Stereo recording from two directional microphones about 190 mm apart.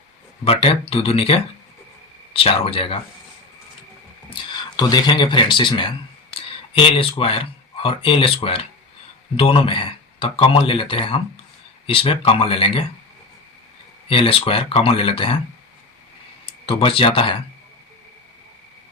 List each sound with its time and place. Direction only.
0.4 s speech: 30° left (ahead or behind)
4.8 s speech: 20° left (ahead or behind)
14.1 s speech: 30° left (ahead or behind)
16.5 s speech: 30° left (ahead or behind)